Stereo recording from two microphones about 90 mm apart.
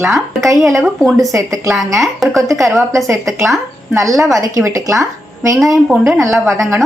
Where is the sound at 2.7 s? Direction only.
35° right (ahead or behind).